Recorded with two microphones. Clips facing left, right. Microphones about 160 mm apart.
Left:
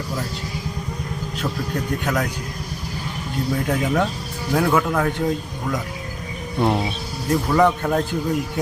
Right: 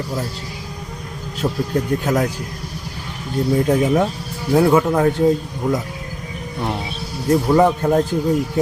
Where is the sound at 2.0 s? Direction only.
30° right (ahead or behind).